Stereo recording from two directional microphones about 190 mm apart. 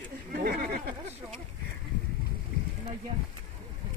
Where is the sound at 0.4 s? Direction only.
55° right (ahead or behind).